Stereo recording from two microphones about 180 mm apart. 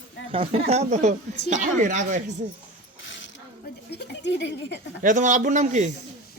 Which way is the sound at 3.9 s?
70° left (ahead or behind).